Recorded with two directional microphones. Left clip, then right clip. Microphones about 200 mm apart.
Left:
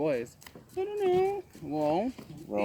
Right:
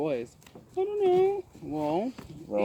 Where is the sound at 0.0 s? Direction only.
20° left (ahead or behind).